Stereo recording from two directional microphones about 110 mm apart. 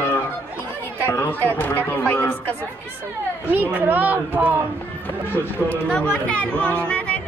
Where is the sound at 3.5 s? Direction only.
15° right (ahead or behind).